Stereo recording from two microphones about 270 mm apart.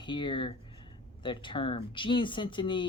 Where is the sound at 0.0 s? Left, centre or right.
Centre.